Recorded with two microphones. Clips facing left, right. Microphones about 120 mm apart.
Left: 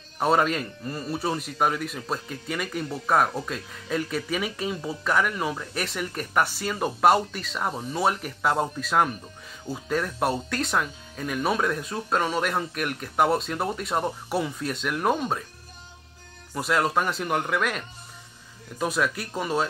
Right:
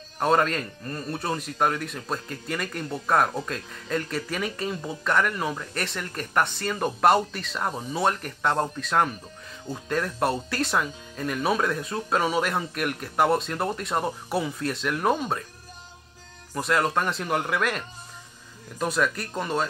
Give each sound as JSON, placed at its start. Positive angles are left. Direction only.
{"t": 0.2, "sound": "speech", "side_deg": 5}
{"t": 16.5, "sound": "speech", "side_deg": 0}